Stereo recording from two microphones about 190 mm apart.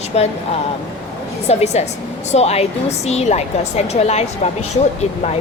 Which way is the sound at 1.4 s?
35° left (ahead or behind).